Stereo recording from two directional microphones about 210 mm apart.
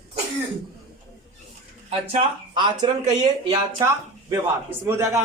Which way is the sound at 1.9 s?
30° right (ahead or behind).